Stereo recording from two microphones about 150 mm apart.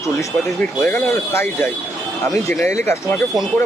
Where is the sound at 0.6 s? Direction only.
5° left (ahead or behind).